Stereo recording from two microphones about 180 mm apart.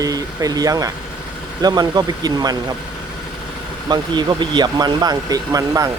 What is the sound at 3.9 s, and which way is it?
Speech, 25° right (ahead or behind).